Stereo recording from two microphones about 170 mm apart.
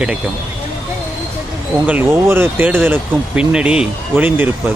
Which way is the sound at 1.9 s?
10° right (ahead or behind).